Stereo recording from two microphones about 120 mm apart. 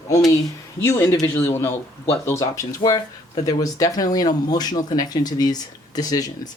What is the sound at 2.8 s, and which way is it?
Speech, 35° left (ahead or behind).